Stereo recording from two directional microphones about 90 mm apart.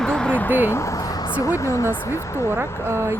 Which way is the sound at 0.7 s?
35° left (ahead or behind).